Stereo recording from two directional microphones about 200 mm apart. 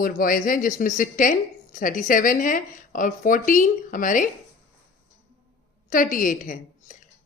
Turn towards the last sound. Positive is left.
turn(degrees=40)  # may be behind; listen again after turning